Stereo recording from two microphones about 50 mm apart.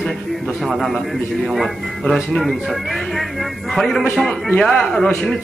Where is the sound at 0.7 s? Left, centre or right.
Centre.